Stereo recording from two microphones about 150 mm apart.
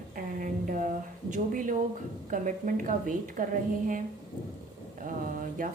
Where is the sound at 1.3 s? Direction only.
60° right (ahead or behind).